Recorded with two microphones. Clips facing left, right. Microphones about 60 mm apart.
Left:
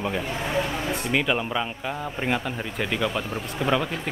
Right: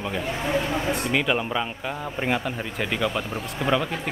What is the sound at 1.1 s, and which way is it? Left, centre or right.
Speech, centre.